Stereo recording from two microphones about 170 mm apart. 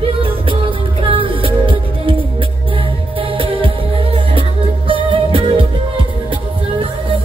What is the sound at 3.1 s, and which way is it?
Music, 30° right (ahead or behind).